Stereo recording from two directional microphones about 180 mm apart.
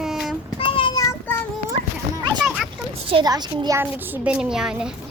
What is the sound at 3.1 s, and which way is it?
A woman's voice, 25° right (ahead or behind).